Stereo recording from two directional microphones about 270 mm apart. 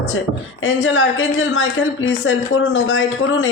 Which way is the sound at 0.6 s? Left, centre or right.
Left.